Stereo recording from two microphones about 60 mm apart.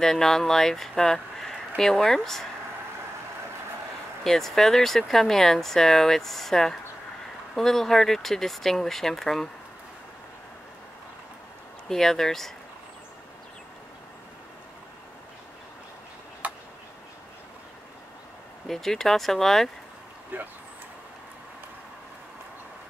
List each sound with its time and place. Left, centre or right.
0.0 s speech: centre
4.2 s speech: centre
11.9 s speech: centre
16.4 s a sound: right
18.7 s speech: centre
20.3 s speech: right